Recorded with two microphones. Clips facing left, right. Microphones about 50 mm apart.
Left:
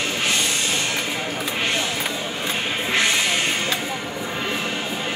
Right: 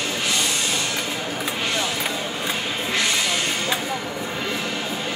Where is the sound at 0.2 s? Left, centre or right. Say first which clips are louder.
Left 1 dB; left.